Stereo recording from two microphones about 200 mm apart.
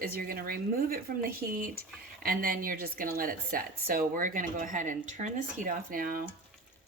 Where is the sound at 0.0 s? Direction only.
50° right (ahead or behind).